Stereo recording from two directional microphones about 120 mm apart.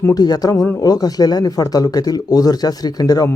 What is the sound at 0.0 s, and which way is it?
Speech, 35° left (ahead or behind).